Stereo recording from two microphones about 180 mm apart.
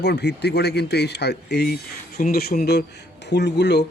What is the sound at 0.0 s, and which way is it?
Speech, 65° left (ahead or behind).